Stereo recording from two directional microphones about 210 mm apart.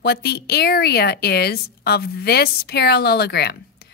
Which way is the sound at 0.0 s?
50° left (ahead or behind).